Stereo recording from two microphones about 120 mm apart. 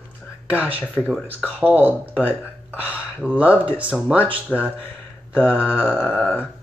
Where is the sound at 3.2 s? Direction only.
10° right (ahead or behind).